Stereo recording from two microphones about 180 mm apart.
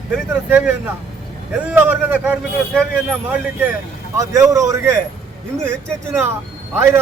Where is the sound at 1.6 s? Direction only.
10° right (ahead or behind).